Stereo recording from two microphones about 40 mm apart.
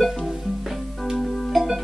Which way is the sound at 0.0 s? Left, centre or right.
Centre.